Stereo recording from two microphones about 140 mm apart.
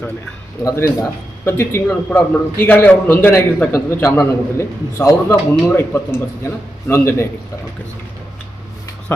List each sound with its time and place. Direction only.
0.6 s a man's voice: 25° left (ahead or behind)